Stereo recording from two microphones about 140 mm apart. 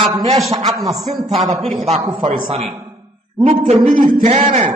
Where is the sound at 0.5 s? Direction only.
25° right (ahead or behind).